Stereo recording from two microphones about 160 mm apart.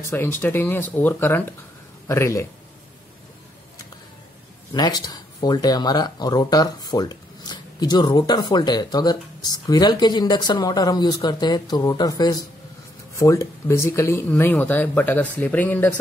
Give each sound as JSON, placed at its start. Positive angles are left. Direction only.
{"t": 0.0, "sound": "speech", "side_deg": 15}
{"t": 4.7, "sound": "speech", "side_deg": 25}